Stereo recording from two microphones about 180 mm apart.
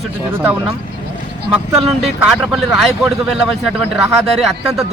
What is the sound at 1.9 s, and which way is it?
Speech, centre (ahead or behind).